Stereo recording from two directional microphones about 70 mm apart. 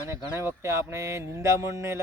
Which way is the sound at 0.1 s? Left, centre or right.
Right.